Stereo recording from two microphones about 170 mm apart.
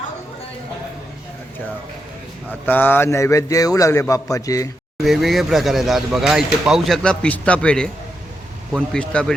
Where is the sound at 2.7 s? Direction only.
10° left (ahead or behind).